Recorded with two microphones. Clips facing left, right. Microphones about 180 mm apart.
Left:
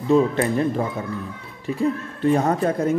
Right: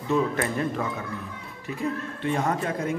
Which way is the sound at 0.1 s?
30° left (ahead or behind).